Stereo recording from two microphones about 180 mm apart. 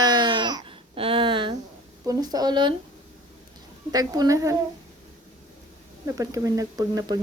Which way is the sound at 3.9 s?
20° right (ahead or behind).